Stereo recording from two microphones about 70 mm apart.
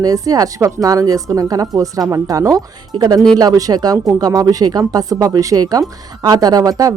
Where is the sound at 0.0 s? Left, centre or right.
Right.